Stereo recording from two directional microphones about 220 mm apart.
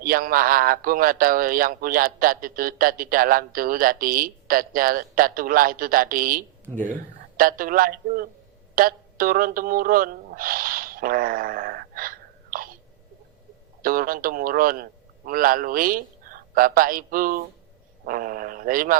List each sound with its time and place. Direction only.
0.0 s speech: 40° right (ahead or behind)
6.7 s speech: 10° right (ahead or behind)
7.3 s speech: 40° right (ahead or behind)
13.8 s a man's voice: 40° right (ahead or behind)